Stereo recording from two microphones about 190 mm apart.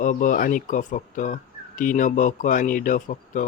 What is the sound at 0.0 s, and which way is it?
A man's voice, 45° left (ahead or behind).